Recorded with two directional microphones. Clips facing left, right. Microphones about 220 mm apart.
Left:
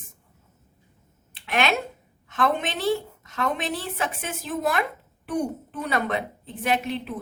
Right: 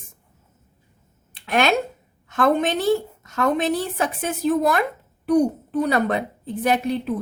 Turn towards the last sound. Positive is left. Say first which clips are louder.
# right 5 dB
turn(degrees=-40)  # may be behind; listen again after turning